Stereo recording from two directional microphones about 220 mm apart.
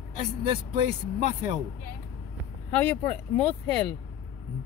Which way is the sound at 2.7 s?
5° left (ahead or behind).